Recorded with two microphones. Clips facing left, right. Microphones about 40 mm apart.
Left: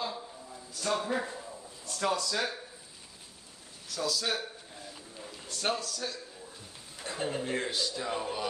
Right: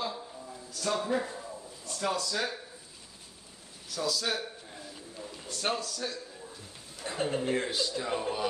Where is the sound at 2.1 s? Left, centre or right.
Left.